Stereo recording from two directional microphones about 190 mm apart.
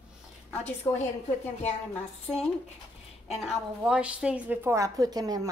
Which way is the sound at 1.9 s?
5° left (ahead or behind).